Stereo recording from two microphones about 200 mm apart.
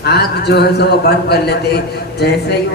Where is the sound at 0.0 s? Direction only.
55° left (ahead or behind).